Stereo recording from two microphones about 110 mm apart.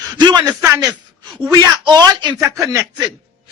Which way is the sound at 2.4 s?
30° right (ahead or behind).